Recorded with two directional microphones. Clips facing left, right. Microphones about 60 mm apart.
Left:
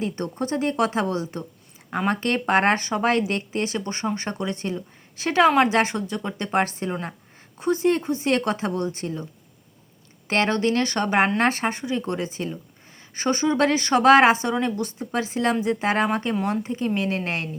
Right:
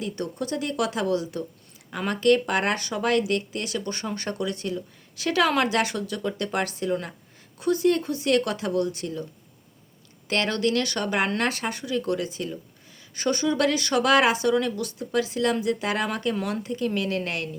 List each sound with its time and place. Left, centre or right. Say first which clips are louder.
0.0 s a woman's voice: left 3 dB; left
10.2 s speech: left 3 dB; left